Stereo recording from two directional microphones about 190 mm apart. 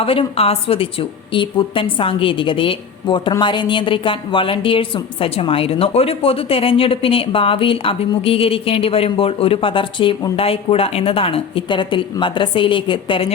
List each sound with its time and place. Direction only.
0.0 s a woman's voice: 30° left (ahead or behind)